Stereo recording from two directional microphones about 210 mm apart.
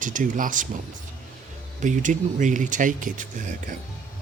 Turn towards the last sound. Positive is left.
turn(degrees=-40)  # may be behind; listen again after turning